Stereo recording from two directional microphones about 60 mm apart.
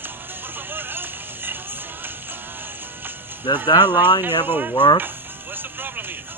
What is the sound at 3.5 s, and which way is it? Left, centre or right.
Speech, right.